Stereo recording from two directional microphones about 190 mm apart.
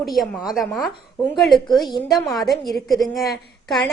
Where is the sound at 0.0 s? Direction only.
Centre (ahead or behind).